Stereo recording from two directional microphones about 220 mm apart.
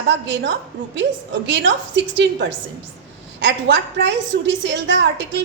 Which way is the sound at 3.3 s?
55° right (ahead or behind).